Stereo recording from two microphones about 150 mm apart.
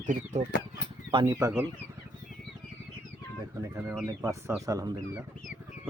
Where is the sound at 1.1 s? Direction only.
30° right (ahead or behind).